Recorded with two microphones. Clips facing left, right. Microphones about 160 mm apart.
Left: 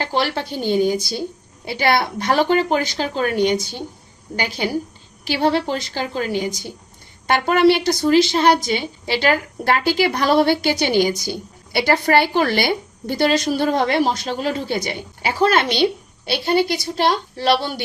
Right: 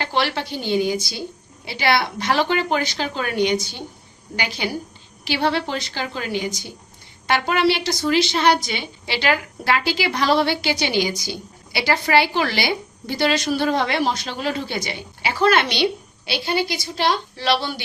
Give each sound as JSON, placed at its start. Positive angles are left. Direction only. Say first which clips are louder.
{"t": 0.0, "sound": "a woman's voice", "louder": "left 1 dB", "side_deg": 40}